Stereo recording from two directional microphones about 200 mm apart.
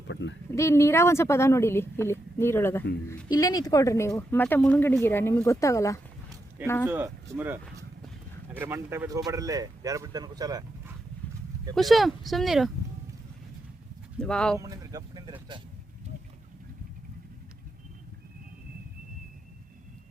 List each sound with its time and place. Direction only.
0.1 s speech: 65° left (ahead or behind)
0.5 s speech: 15° left (ahead or behind)
6.8 s speech: 10° right (ahead or behind)
11.7 s speech: centre (ahead or behind)
14.2 s speech: 5° left (ahead or behind)
14.6 s vehicle: 15° right (ahead or behind)